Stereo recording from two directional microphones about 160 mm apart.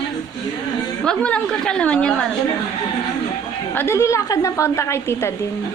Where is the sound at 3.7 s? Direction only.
15° left (ahead or behind).